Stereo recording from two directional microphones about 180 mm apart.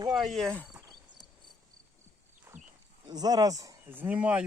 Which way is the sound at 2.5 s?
15° right (ahead or behind).